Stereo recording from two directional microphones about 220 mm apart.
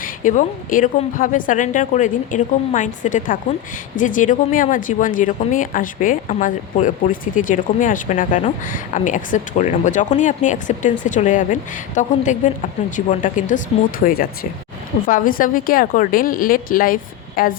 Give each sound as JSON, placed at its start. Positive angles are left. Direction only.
{"t": 0.0, "sound": "speech", "side_deg": 35}